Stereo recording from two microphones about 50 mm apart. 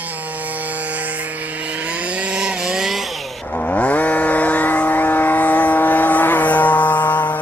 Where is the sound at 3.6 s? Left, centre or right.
Left.